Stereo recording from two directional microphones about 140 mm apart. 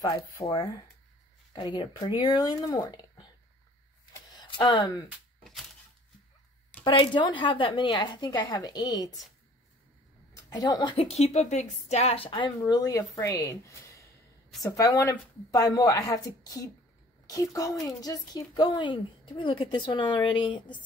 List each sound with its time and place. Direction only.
0.4 s a woman's voice: 40° left (ahead or behind)
4.0 s a sound: 30° left (ahead or behind)
6.8 s a woman's voice: 35° left (ahead or behind)
10.3 s speech: 25° left (ahead or behind)
11.1 s a woman's voice: 50° left (ahead or behind); by 20.8 s 35° left (ahead or behind)